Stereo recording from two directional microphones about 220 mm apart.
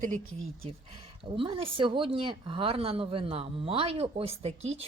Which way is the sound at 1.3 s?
25° right (ahead or behind).